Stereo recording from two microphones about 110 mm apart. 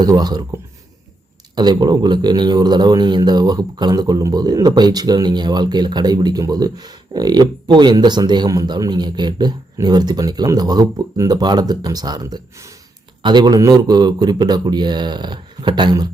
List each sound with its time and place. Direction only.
0.0 s speech: 40° right (ahead or behind)
1.5 s speech: 40° right (ahead or behind)
13.2 s speech: 45° right (ahead or behind)